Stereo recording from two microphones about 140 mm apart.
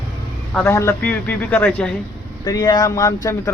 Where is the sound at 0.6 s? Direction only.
20° left (ahead or behind).